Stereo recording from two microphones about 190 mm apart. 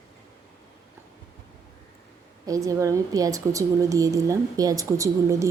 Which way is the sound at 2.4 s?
15° right (ahead or behind).